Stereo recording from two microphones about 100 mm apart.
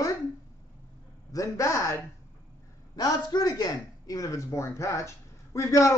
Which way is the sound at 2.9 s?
40° left (ahead or behind).